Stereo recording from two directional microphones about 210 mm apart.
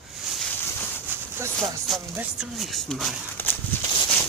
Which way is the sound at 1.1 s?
10° right (ahead or behind).